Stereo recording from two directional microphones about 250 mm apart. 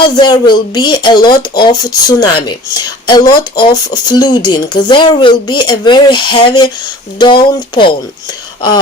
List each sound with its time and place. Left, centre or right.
0.2 s speech: centre